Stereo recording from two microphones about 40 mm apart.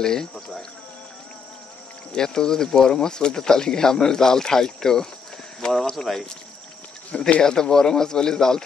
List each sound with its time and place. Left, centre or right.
0.0 s speech: centre
2.1 s speech: centre
7.1 s speech: left
7.4 s speech: centre